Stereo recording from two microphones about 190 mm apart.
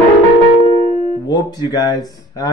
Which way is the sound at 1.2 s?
20° left (ahead or behind).